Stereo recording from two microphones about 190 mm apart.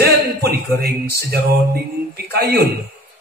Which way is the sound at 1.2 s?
55° right (ahead or behind).